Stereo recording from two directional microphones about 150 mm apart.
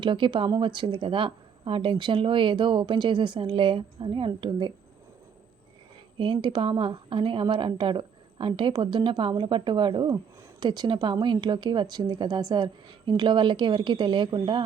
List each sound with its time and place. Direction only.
0.0 s speech: 35° right (ahead or behind)
6.1 s speech: 35° right (ahead or behind)